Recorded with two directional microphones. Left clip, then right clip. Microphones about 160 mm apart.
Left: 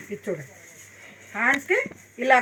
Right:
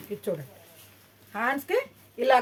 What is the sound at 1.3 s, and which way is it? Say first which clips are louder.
Speech: left 5 dB; 60° right (ahead or behind).